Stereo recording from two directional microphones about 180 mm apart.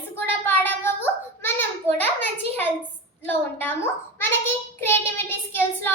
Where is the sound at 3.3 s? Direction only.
10° left (ahead or behind).